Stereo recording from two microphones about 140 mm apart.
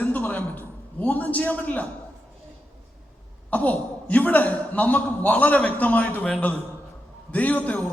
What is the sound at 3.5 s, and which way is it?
A man's voice, 10° left (ahead or behind).